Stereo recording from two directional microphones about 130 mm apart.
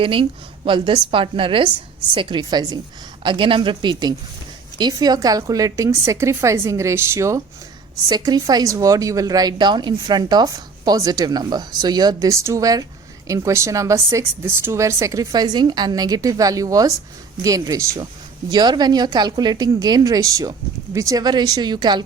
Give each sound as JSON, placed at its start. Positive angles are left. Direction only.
{"t": 0.0, "sound": "speech", "side_deg": -45}
{"t": 18.0, "sound": "speech", "side_deg": -35}